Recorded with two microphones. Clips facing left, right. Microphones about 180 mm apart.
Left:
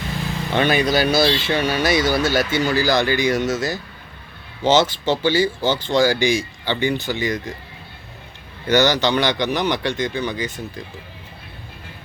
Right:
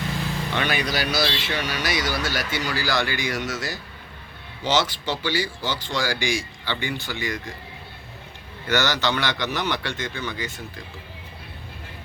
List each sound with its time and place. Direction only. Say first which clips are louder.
0.5 s speech: left 9 dB; 25° left (ahead or behind)
8.6 s speech: left 6 dB; 20° left (ahead or behind)